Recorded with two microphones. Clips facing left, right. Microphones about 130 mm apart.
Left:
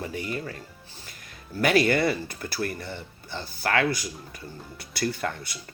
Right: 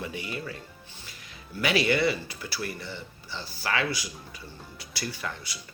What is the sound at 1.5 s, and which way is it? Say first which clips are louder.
Speech: left 3 dB; 50° left (ahead or behind).